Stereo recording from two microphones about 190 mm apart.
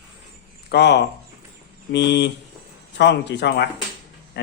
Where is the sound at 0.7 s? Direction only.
65° left (ahead or behind).